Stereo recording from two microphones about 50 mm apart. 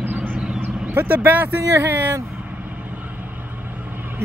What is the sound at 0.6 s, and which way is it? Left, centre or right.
Speech, right.